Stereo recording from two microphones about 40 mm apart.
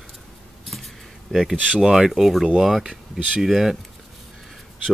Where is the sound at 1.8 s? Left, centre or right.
Centre.